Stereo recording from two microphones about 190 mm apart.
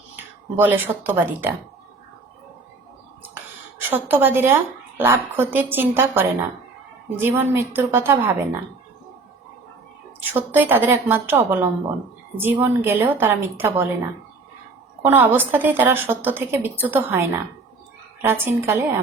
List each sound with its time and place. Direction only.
0.5 s a woman's voice: 10° right (ahead or behind)
3.8 s a woman's voice: 10° right (ahead or behind)
10.2 s a woman's voice: 10° right (ahead or behind)
15.0 s a woman's voice: 10° right (ahead or behind)